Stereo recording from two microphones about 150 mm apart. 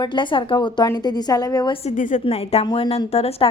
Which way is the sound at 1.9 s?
55° left (ahead or behind).